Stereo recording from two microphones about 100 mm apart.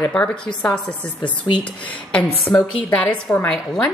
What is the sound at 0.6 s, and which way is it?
A woman's voice, 10° left (ahead or behind).